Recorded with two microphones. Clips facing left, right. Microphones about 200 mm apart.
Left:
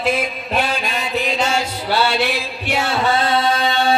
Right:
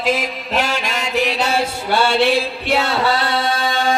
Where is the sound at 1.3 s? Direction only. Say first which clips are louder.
Right 1 dB; 35° right (ahead or behind).